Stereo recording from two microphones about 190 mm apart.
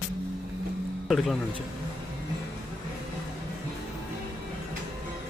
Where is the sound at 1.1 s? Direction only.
Centre (ahead or behind).